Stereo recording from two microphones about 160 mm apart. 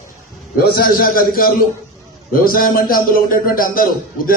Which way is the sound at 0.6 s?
70° left (ahead or behind).